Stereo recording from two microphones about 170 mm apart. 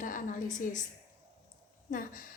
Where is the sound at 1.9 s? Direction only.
55° left (ahead or behind).